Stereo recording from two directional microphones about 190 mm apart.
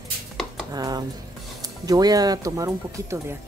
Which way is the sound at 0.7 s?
20° right (ahead or behind).